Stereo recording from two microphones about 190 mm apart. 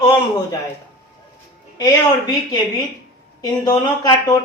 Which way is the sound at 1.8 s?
20° left (ahead or behind).